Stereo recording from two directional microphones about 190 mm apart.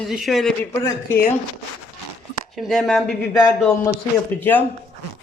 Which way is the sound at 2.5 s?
Centre (ahead or behind).